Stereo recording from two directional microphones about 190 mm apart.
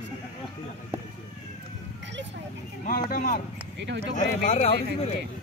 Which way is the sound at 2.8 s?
45° left (ahead or behind).